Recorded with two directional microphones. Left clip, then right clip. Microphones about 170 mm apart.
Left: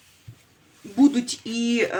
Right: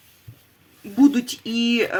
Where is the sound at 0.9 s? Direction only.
35° right (ahead or behind).